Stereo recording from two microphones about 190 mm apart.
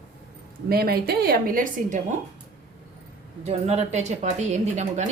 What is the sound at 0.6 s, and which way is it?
A woman's voice, 55° right (ahead or behind).